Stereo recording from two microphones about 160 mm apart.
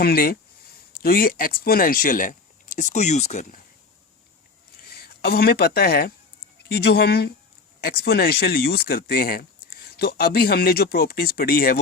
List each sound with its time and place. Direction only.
0.0 s speech: 70° left (ahead or behind); by 3.6 s 45° left (ahead or behind)
4.9 s speech: 75° left (ahead or behind)
6.7 s speech: 90° left
7.9 s speech: 75° left (ahead or behind)